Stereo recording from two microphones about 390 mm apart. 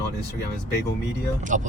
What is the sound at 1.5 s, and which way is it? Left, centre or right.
Speech, centre.